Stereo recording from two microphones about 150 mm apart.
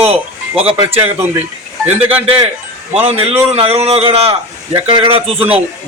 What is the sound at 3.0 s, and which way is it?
A man's voice, 45° right (ahead or behind).